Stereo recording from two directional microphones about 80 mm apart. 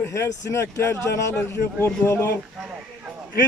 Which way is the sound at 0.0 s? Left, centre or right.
Left.